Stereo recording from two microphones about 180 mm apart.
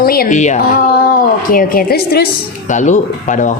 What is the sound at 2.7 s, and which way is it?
Speech, 45° left (ahead or behind).